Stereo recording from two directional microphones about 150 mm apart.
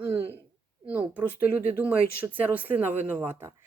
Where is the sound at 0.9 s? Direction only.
10° right (ahead or behind).